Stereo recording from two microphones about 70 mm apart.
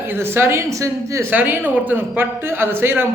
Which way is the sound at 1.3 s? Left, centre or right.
Right.